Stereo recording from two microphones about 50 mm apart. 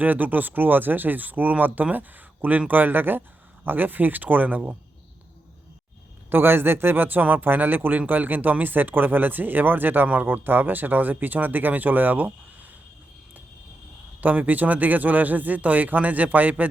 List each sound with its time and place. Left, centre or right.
0.0 s speech: right
6.3 s speech: right
14.2 s speech: right